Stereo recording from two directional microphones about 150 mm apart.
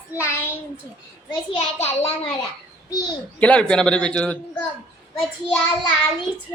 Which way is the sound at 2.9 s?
25° left (ahead or behind).